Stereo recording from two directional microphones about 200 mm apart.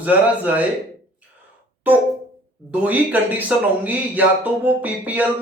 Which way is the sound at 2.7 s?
10° right (ahead or behind).